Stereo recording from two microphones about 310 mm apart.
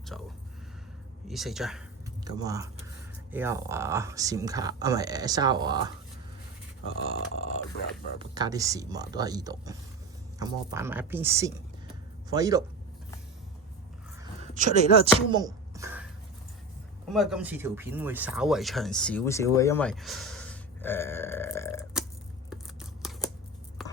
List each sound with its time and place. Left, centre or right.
0.1 s speech: centre
1.3 s speech: centre
2.2 s speech: centre
6.8 s speech: left
7.3 s speech: right
7.8 s speech: left
8.2 s speech: centre
15.3 s a sound: centre
17.1 s speech: centre
22.4 s scissors: centre